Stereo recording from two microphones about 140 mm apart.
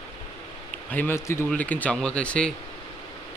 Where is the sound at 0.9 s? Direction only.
15° left (ahead or behind).